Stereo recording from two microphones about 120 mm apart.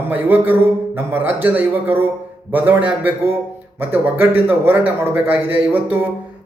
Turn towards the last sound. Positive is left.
turn(degrees=-15)  # may be behind; listen again after turning